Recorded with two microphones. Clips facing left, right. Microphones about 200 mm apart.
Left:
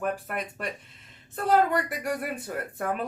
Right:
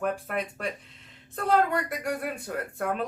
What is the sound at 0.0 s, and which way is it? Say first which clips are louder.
Speech: right 1 dB; centre (ahead or behind).